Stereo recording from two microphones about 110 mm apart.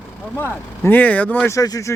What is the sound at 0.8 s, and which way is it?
Speech, 15° left (ahead or behind).